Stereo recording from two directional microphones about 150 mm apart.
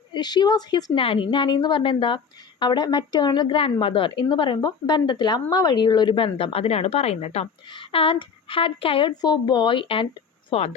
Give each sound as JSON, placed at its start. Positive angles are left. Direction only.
{"t": 0.1, "sound": "a woman's voice", "side_deg": 30}